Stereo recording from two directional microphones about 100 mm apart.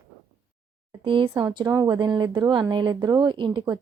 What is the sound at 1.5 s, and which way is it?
A woman's voice, 40° right (ahead or behind).